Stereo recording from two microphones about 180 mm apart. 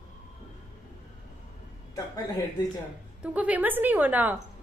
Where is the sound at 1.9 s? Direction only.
20° left (ahead or behind).